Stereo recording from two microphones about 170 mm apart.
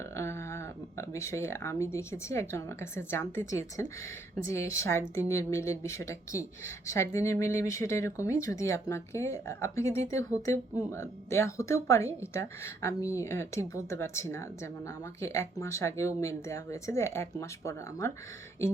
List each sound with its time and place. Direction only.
0.2 s speech: 15° left (ahead or behind)